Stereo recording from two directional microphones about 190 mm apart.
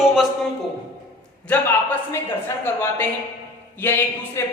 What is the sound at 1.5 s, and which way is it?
A woman's voice, 10° left (ahead or behind).